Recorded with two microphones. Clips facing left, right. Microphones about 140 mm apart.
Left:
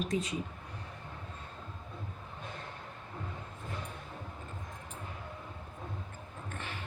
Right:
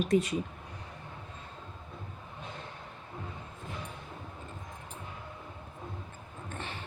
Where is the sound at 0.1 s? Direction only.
65° right (ahead or behind).